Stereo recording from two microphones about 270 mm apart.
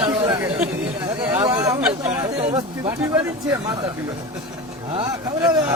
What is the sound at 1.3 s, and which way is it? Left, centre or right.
Chatter, centre.